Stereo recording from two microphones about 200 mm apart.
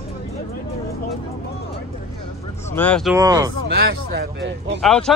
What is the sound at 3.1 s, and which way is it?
Speech, 15° right (ahead or behind).